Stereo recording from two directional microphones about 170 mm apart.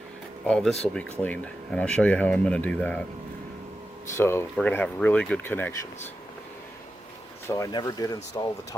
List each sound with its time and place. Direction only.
0.4 s speech: 5° left (ahead or behind)
4.2 s speech: 15° left (ahead or behind)
7.4 s speech: 20° left (ahead or behind)